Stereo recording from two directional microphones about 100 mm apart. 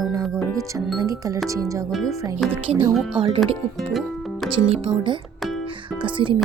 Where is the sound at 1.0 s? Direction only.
35° right (ahead or behind).